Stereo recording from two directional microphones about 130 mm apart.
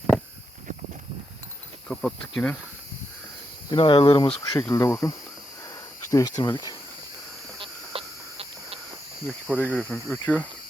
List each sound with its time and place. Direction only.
1.9 s speech: 5° left (ahead or behind)
3.7 s speech: 40° left (ahead or behind)
4.7 s speech: 20° left (ahead or behind)
7.6 s a sound: 45° right (ahead or behind)
9.6 s speech: 10° left (ahead or behind)